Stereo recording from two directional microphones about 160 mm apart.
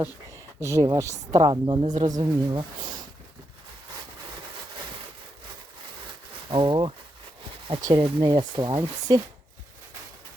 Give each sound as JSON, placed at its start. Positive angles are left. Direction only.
{"t": 0.0, "sound": "speech", "side_deg": -20}
{"t": 6.5, "sound": "speech", "side_deg": -30}